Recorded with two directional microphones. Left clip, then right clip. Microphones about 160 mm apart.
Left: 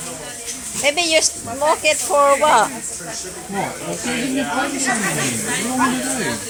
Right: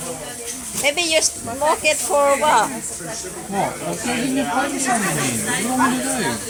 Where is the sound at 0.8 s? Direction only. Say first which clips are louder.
Left 2 dB; 20° right (ahead or behind).